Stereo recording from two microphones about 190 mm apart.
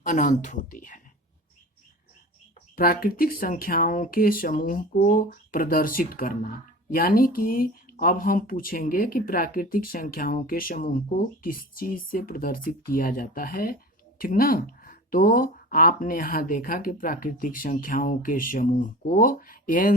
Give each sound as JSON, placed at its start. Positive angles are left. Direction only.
{"t": 0.0, "sound": "speech", "side_deg": 40}
{"t": 2.7, "sound": "speech", "side_deg": 50}